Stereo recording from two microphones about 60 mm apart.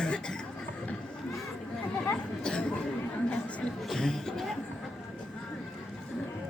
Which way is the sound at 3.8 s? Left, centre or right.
Centre.